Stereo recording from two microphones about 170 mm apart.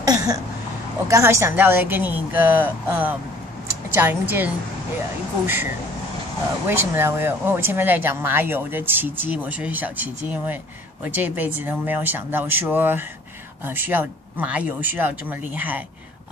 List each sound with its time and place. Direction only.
0.0 s a sound: 20° right (ahead or behind)
1.0 s speech: 20° right (ahead or behind)
6.7 s speech: 15° right (ahead or behind)